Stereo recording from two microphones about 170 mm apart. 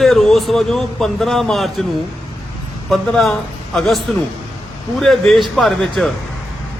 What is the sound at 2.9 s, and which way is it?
A man's voice, centre (ahead or behind).